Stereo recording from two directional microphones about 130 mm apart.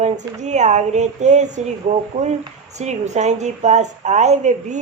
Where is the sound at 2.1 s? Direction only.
90° right.